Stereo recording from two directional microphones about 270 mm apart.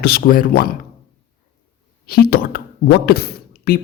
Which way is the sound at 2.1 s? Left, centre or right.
Left.